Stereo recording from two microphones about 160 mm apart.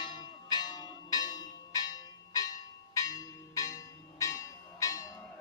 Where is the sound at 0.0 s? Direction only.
25° left (ahead or behind).